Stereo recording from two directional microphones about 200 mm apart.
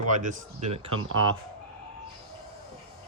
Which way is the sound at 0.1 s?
40° right (ahead or behind).